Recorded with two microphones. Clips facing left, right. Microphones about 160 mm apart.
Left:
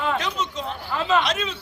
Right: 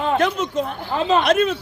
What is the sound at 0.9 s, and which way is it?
Speech, 35° right (ahead or behind).